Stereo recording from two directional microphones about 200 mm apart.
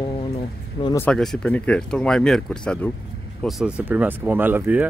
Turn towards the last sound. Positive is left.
turn(degrees=-10)  # may be behind; listen again after turning